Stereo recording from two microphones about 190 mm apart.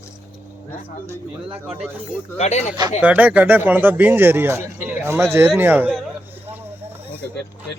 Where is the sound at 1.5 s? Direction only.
5° right (ahead or behind).